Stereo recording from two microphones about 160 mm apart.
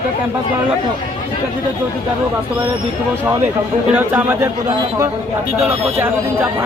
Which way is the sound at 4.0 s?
10° right (ahead or behind).